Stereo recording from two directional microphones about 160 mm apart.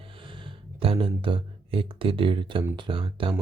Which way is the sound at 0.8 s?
35° right (ahead or behind).